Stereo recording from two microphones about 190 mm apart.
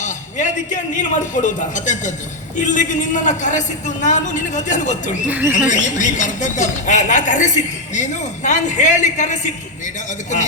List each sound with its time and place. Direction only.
0.0 s a man's voice: 40° left (ahead or behind)